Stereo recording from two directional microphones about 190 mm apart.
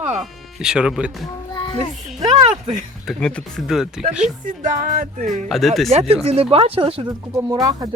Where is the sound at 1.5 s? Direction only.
25° left (ahead or behind).